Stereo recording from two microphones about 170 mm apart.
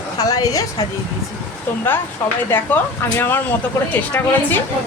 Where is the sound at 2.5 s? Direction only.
10° left (ahead or behind).